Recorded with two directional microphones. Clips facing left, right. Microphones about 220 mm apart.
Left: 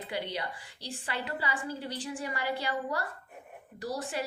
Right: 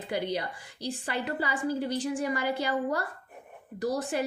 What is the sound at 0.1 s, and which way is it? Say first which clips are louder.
A woman's voice: right 6 dB; 45° right (ahead or behind).